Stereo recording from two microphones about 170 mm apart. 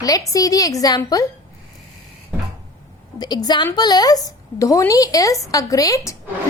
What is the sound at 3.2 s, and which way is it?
A woman's voice, 25° left (ahead or behind).